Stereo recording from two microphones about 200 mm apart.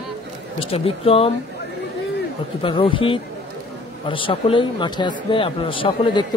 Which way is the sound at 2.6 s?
25° left (ahead or behind).